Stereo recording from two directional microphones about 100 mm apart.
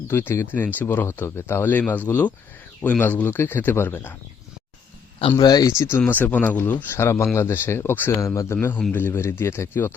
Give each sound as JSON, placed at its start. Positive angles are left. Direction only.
{"t": 0.1, "sound": "speech", "side_deg": 25}
{"t": 5.4, "sound": "speech", "side_deg": 40}
{"t": 5.7, "sound": "speech", "side_deg": 25}